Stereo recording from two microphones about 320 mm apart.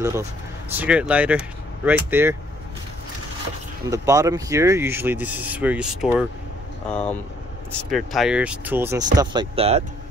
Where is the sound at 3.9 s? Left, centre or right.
Centre.